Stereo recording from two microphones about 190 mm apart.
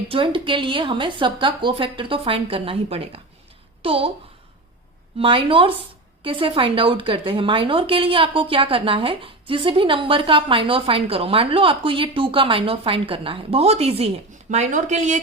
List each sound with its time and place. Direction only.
0.1 s a woman's voice: 25° right (ahead or behind)
5.2 s a woman's voice: 30° right (ahead or behind)